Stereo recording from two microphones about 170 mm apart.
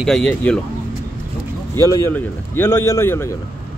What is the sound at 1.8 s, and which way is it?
A man's voice, 20° left (ahead or behind).